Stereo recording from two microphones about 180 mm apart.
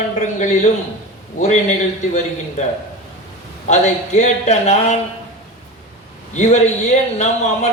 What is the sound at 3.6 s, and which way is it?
A man's voice, 40° left (ahead or behind).